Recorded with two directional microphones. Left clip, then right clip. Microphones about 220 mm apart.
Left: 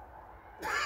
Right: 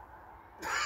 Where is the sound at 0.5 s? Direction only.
Centre (ahead or behind).